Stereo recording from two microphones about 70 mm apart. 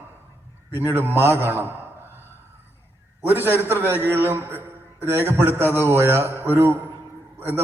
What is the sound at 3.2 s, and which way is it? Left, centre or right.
A man's voice, right.